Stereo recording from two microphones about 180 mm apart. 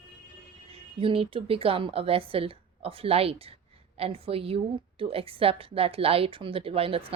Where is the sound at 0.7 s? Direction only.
30° right (ahead or behind).